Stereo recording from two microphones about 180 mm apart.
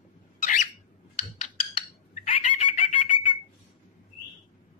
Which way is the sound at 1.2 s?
35° left (ahead or behind).